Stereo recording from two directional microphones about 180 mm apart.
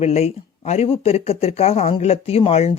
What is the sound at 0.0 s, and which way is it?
Speech, 35° left (ahead or behind).